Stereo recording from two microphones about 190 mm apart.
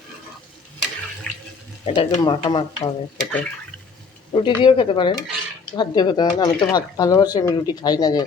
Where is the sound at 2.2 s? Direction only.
25° left (ahead or behind).